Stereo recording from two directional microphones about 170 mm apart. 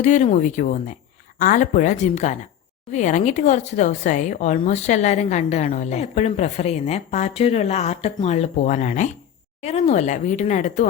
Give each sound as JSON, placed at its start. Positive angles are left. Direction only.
{"t": 0.0, "sound": "speech", "side_deg": 45}